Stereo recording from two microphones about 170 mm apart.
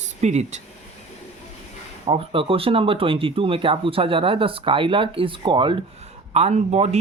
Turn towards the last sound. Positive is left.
turn(degrees=-40)  # may be behind; listen again after turning